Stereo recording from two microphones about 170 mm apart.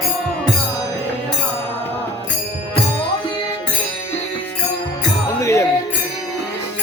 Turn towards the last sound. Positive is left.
turn(degrees=15)  # may be behind; listen again after turning